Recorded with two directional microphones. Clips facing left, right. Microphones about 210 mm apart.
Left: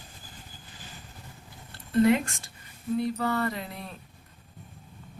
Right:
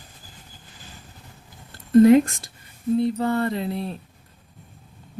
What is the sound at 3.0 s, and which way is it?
Mantra, 25° right (ahead or behind).